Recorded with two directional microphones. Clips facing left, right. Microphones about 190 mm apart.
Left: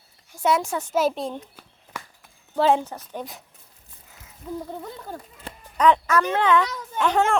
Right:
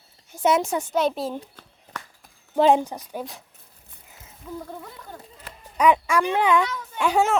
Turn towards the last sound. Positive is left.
turn(degrees=-10)  # may be behind; listen again after turning